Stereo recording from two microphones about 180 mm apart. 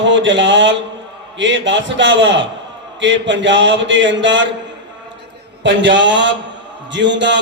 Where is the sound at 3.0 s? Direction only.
90° right.